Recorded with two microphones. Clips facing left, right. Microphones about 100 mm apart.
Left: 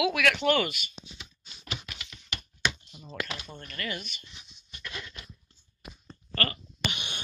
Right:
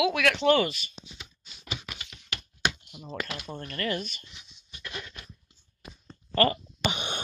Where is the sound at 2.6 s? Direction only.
60° right (ahead or behind).